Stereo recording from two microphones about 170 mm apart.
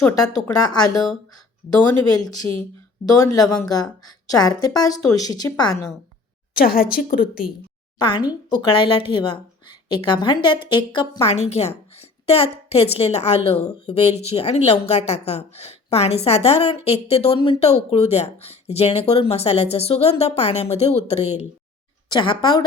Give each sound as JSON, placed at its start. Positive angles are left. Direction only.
{"t": 0.6, "sound": "speech", "side_deg": 25}
{"t": 3.2, "sound": "speech", "side_deg": 20}
{"t": 3.4, "sound": "speech", "side_deg": 5}
{"t": 3.7, "sound": "speech", "side_deg": 25}
{"t": 6.5, "sound": "a woman's voice", "side_deg": 60}
{"t": 7.9, "sound": "speech", "side_deg": 25}
{"t": 11.3, "sound": "a woman's voice", "side_deg": 40}
{"t": 22.1, "sound": "speech", "side_deg": 30}